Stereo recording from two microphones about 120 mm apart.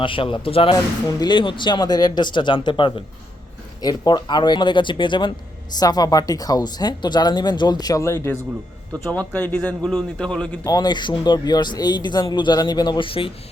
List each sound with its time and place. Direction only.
0.0 s a man's voice: 45° left (ahead or behind); by 10.6 s 5° left (ahead or behind)
10.6 s speech: 30° left (ahead or behind); by 13.3 s 50° left (ahead or behind)